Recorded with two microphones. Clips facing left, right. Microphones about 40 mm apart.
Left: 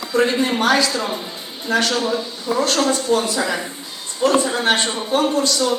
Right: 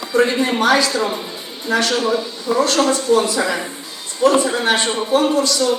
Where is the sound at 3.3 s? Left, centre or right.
Centre.